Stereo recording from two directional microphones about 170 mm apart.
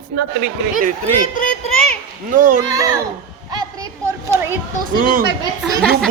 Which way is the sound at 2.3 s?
50° right (ahead or behind).